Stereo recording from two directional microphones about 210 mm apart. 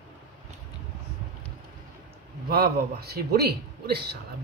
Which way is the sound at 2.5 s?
45° right (ahead or behind).